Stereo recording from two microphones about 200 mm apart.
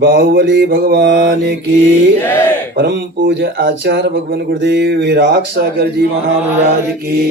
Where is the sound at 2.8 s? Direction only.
55° right (ahead or behind).